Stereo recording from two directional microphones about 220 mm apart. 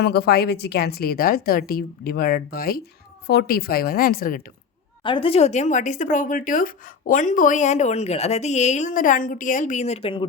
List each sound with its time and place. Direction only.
0.0 s speech: 45° left (ahead or behind)
5.0 s speech: 25° left (ahead or behind)